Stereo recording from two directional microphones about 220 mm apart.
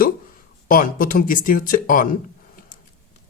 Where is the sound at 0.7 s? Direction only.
40° left (ahead or behind).